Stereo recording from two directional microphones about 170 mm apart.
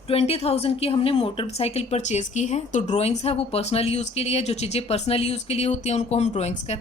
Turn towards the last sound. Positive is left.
turn(degrees=45)  # may be behind; listen again after turning